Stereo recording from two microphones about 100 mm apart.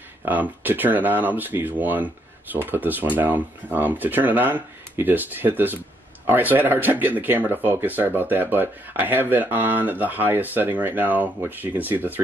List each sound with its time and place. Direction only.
0.2 s speech: 20° right (ahead or behind)